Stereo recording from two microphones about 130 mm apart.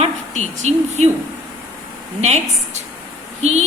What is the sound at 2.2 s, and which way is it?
A woman's voice, 60° right (ahead or behind).